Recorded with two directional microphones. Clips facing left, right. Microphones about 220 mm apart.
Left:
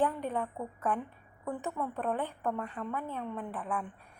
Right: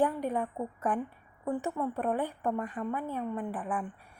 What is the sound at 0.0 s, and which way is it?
A woman's voice, 10° right (ahead or behind).